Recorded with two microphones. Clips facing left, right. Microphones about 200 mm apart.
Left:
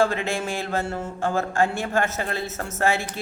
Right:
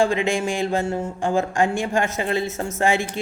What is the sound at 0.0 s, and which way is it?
A woman's voice, 15° right (ahead or behind).